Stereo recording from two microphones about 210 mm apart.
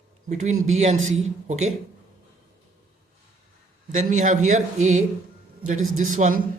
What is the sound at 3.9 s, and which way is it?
A man's voice, 35° right (ahead or behind).